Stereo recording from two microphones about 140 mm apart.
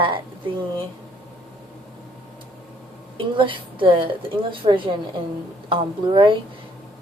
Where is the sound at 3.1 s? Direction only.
35° right (ahead or behind).